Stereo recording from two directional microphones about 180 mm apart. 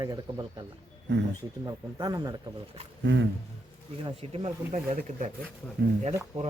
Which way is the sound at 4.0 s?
30° right (ahead or behind).